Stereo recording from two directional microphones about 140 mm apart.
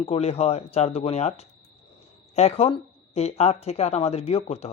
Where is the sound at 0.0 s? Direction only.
45° left (ahead or behind).